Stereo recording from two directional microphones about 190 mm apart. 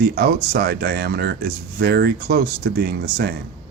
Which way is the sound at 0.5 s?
55° right (ahead or behind).